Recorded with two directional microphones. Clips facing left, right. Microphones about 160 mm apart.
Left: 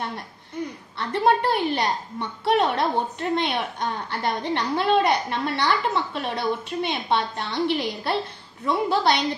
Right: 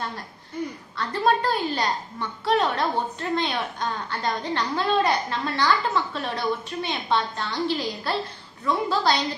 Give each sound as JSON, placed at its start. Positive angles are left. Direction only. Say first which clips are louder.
{"t": 0.9, "sound": "a woman's voice", "louder": "left 2 dB", "side_deg": 25}